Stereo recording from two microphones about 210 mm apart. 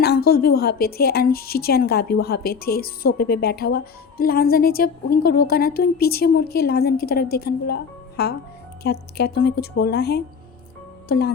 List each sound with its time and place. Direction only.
0.0 s a woman's voice: 50° left (ahead or behind)